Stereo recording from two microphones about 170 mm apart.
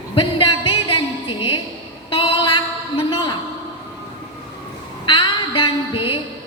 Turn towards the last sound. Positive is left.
turn(degrees=30)  # may be behind; listen again after turning